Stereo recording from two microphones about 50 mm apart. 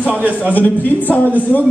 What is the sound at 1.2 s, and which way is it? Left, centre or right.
Speech, right.